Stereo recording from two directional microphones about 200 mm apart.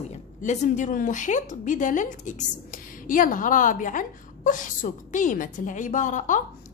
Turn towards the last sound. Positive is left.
turn(degrees=40)  # may be behind; listen again after turning